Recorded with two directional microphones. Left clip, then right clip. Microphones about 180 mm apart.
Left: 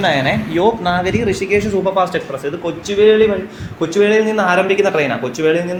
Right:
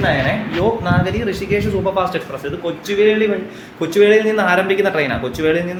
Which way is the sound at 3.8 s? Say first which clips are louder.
Right 1 dB; centre (ahead or behind).